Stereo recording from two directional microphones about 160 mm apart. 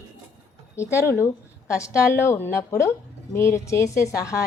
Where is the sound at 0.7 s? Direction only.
15° left (ahead or behind).